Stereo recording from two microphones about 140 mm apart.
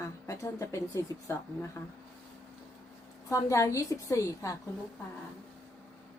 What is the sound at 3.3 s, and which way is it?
A woman's voice, 20° left (ahead or behind).